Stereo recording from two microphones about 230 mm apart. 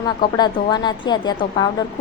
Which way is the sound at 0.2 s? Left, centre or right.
Centre.